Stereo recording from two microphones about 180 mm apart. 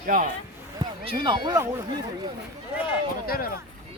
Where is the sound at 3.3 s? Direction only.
55° left (ahead or behind).